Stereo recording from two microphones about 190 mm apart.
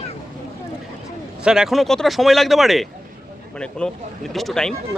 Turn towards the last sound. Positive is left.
turn(degrees=0)  # may be behind; listen again after turning